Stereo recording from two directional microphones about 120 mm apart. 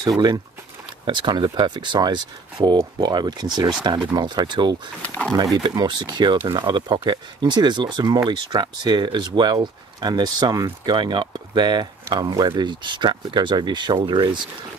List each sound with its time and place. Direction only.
1.0 s speech: 40° right (ahead or behind)
5.0 s speech: 10° left (ahead or behind)
5.5 s speech: 35° right (ahead or behind)